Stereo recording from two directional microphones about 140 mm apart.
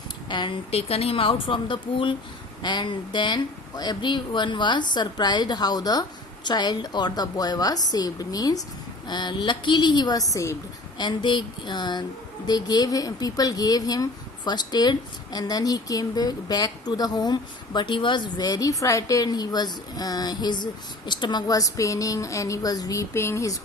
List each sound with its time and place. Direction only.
0.3 s speech: 35° left (ahead or behind)
10.9 s speech: 30° left (ahead or behind)